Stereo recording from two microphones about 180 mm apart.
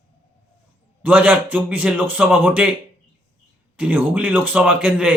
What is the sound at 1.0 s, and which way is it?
A man's voice, 5° right (ahead or behind).